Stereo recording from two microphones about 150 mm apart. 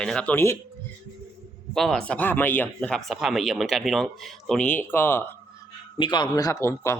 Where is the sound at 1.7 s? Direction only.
5° left (ahead or behind).